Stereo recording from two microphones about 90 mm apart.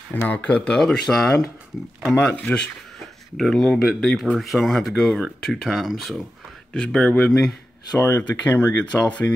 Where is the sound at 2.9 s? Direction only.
Centre (ahead or behind).